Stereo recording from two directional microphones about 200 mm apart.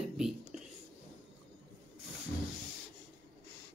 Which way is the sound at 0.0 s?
Centre (ahead or behind).